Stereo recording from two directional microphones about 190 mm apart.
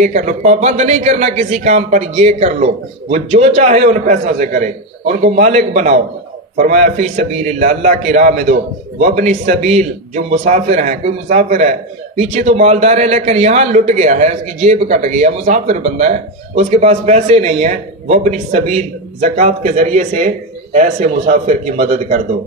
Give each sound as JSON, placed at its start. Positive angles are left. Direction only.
{"t": 0.0, "sound": "a man's voice", "side_deg": -40}